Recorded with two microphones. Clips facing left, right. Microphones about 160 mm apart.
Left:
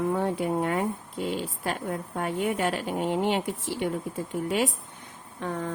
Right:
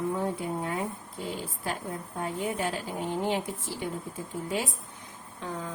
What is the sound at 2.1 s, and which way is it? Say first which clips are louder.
Speech: left 3 dB; 75° left (ahead or behind).